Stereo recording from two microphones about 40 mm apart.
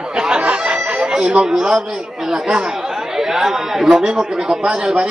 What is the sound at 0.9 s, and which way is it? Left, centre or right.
Music, right.